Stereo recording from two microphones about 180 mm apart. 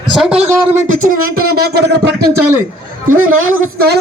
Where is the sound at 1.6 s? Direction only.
65° right (ahead or behind).